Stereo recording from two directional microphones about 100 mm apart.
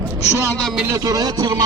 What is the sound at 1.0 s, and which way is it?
Speech, 40° right (ahead or behind).